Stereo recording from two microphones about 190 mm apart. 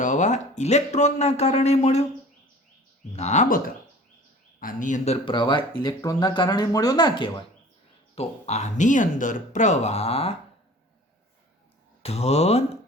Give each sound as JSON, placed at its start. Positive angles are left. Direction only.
{"t": 0.0, "sound": "speech", "side_deg": 40}
{"t": 3.1, "sound": "speech", "side_deg": 35}
{"t": 4.6, "sound": "speech", "side_deg": 40}
{"t": 8.1, "sound": "speech", "side_deg": 35}
{"t": 12.0, "sound": "speech", "side_deg": 35}